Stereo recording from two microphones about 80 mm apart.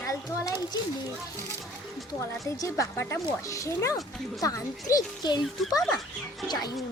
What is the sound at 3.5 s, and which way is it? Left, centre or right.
Speech, left.